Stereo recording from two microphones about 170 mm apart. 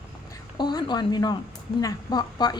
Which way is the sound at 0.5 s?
25° left (ahead or behind).